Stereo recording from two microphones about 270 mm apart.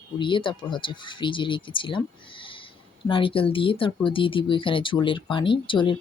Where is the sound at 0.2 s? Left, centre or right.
Centre.